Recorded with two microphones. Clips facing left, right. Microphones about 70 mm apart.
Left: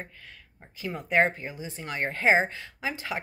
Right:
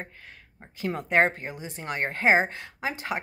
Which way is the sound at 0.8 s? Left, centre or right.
Right.